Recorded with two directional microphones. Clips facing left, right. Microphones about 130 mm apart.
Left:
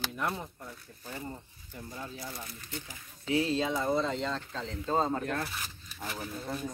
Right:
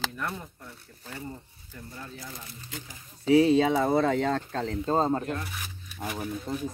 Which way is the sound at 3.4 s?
70° right (ahead or behind).